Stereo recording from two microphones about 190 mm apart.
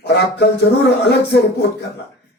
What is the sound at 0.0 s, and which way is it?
Music, 60° left (ahead or behind).